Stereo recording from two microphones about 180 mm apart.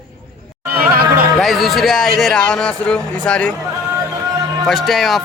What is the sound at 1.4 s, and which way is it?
Speech, centre (ahead or behind).